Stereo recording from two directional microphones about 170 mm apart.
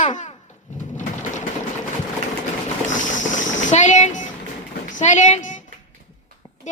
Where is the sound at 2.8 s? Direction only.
45° left (ahead or behind).